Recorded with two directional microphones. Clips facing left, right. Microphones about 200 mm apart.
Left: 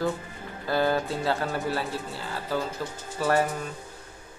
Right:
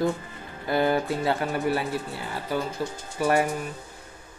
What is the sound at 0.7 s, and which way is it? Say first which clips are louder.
Speech: right 2 dB; 20° right (ahead or behind).